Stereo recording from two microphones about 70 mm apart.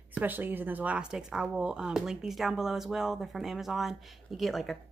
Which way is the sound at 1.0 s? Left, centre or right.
Centre.